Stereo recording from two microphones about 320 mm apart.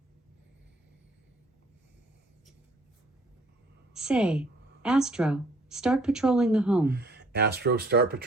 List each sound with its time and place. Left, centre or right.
3.9 s a woman's voice: centre
6.8 s speech: right